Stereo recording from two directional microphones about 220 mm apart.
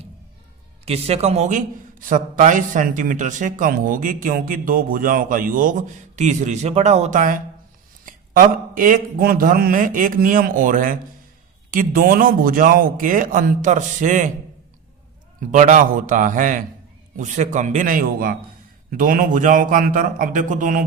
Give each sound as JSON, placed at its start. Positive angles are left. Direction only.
{"t": 0.9, "sound": "a man's voice", "side_deg": -30}
{"t": 15.5, "sound": "a man's voice", "side_deg": -35}